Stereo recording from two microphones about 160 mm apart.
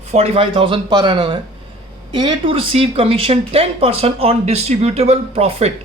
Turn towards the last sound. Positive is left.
turn(degrees=-40)  # may be behind; listen again after turning